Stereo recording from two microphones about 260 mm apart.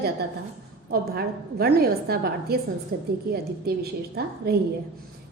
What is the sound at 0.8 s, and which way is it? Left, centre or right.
A woman's voice, right.